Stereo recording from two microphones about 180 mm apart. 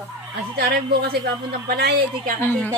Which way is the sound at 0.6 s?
60° right (ahead or behind).